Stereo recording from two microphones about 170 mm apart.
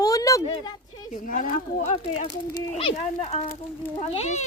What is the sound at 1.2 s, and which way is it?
Speech, 50° left (ahead or behind).